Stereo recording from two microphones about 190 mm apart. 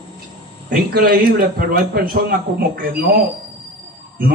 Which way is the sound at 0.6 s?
50° right (ahead or behind).